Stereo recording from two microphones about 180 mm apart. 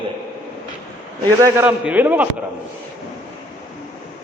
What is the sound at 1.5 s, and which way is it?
Speech, 10° right (ahead or behind).